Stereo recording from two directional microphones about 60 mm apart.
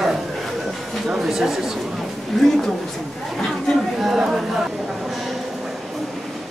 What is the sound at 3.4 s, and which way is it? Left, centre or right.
Chatter, centre.